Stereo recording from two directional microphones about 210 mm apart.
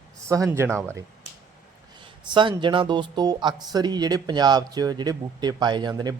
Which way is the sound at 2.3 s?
20° right (ahead or behind).